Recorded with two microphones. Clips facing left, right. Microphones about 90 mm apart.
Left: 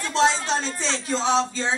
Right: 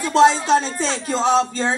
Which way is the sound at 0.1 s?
45° right (ahead or behind).